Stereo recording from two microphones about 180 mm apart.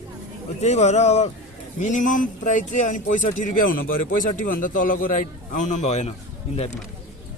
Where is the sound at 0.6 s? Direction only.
40° left (ahead or behind).